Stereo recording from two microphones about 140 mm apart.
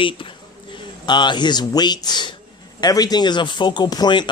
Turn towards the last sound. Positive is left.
turn(degrees=30)  # may be behind; listen again after turning